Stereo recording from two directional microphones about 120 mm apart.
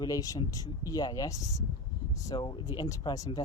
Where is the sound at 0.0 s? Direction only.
30° left (ahead or behind).